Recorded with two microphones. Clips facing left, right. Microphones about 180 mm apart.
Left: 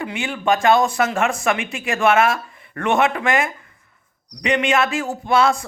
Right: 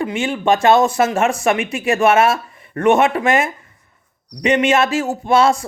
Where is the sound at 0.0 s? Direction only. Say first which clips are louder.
Right 5 dB; 25° right (ahead or behind).